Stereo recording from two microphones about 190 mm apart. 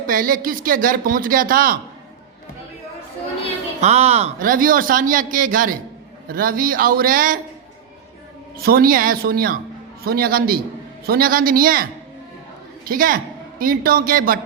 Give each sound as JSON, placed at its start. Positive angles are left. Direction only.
{"t": 0.1, "sound": "a man's voice", "side_deg": -45}
{"t": 3.8, "sound": "a man's voice", "side_deg": -35}
{"t": 8.5, "sound": "a man's voice", "side_deg": -50}
{"t": 12.9, "sound": "a man's voice", "side_deg": -50}